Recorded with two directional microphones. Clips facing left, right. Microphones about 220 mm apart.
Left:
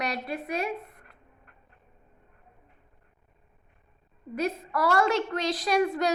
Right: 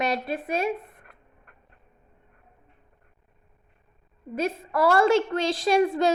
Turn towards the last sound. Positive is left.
turn(degrees=-25)  # may be behind; listen again after turning